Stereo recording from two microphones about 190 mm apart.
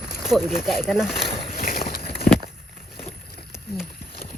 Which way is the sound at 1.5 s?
45° left (ahead or behind).